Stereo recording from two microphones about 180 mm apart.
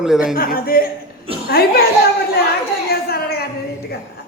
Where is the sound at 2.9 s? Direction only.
60° left (ahead or behind).